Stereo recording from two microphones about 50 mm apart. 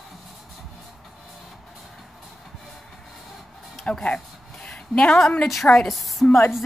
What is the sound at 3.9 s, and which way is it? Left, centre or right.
Speech, left.